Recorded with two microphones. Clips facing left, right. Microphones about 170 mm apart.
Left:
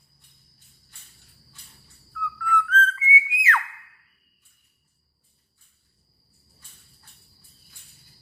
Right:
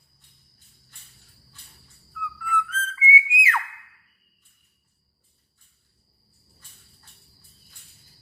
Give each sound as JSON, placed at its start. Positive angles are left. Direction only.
{"t": 2.2, "sound": "whistle", "side_deg": -10}